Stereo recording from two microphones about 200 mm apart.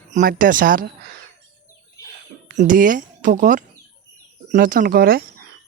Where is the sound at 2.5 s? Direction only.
40° right (ahead or behind).